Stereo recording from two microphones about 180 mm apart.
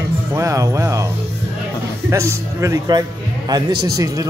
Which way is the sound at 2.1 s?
15° right (ahead or behind).